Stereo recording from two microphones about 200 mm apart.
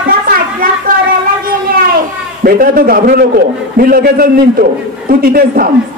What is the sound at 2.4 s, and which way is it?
A man's voice, 45° right (ahead or behind).